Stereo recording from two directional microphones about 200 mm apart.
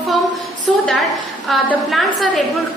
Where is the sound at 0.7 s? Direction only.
Centre (ahead or behind).